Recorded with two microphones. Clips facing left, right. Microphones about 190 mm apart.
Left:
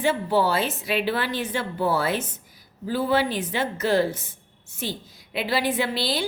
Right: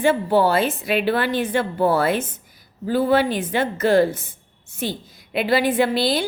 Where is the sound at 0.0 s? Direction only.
55° right (ahead or behind).